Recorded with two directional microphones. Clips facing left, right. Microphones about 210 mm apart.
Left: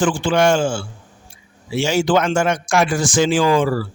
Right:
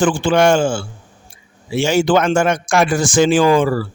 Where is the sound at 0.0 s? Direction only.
50° right (ahead or behind).